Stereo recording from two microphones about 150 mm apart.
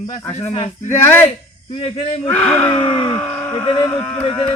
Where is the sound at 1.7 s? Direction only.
35° left (ahead or behind).